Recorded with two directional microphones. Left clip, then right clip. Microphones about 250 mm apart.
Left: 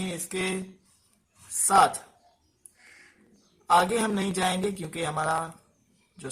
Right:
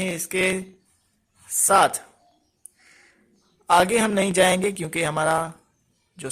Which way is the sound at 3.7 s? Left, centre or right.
Right.